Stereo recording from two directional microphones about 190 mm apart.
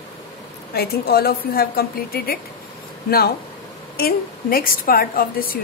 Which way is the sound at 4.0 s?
50° left (ahead or behind).